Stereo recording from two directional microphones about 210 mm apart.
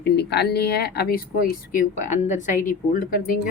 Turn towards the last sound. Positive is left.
turn(degrees=40)  # may be behind; listen again after turning